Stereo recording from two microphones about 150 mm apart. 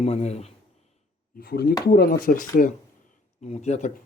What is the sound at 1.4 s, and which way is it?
Speech, 90° left.